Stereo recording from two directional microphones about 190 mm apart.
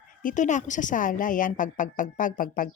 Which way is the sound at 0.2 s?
40° left (ahead or behind).